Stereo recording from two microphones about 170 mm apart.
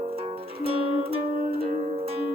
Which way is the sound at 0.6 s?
35° right (ahead or behind).